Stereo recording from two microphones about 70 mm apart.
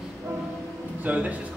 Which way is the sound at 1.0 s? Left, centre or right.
Right.